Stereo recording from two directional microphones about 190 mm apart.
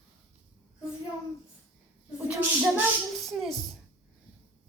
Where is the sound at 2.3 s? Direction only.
5° right (ahead or behind).